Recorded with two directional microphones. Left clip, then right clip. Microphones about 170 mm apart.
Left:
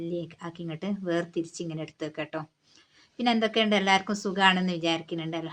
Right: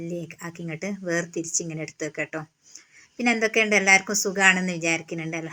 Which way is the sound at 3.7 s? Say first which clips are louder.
Right 5 dB; 20° right (ahead or behind).